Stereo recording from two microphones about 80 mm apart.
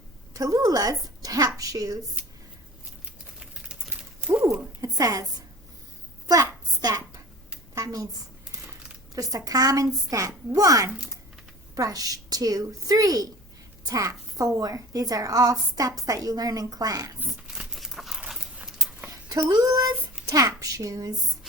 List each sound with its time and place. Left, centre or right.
0.3 s a woman's voice: right
3.0 s typing: centre
3.9 s a sound: centre
4.8 s a woman's voice: right
6.2 s a sound: right
7.8 s a woman's voice: right
17.5 s crumpling: centre
18.3 s dog: centre
19.0 s speech: right
20.2 s a sound: centre
20.6 s a woman's voice: right